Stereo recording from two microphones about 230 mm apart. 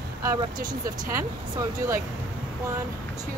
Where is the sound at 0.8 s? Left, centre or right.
Centre.